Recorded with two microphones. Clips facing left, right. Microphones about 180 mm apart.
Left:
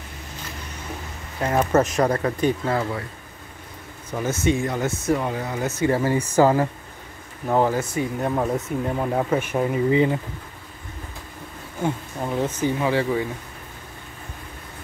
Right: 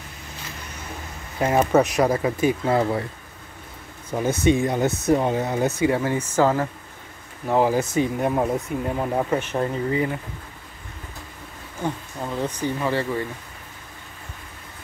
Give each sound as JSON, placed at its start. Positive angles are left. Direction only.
{"t": 1.4, "sound": "speech", "side_deg": -10}
{"t": 2.8, "sound": "speech", "side_deg": -25}
{"t": 4.1, "sound": "speech", "side_deg": -10}
{"t": 5.9, "sound": "speech", "side_deg": 5}
{"t": 7.4, "sound": "speech", "side_deg": 0}
{"t": 7.7, "sound": "speech", "side_deg": -20}
{"t": 8.5, "sound": "speech", "side_deg": 0}
{"t": 11.8, "sound": "speech", "side_deg": 15}